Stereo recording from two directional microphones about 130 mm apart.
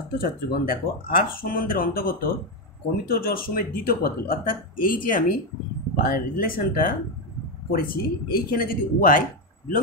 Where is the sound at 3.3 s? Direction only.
90° left.